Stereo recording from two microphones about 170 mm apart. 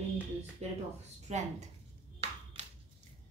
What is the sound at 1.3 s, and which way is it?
Speech, 40° right (ahead or behind).